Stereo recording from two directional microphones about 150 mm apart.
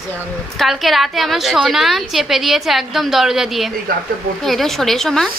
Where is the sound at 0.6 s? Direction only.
Centre (ahead or behind).